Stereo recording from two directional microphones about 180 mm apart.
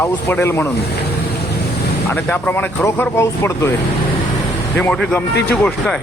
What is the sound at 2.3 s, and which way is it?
Speech, 10° left (ahead or behind).